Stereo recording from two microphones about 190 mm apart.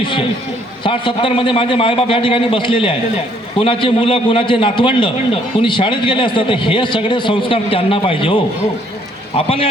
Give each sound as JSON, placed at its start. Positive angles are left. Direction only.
{"t": 0.0, "sound": "a man's voice", "side_deg": 25}